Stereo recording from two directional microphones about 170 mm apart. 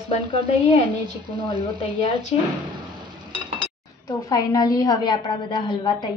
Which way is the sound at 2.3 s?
35° left (ahead or behind).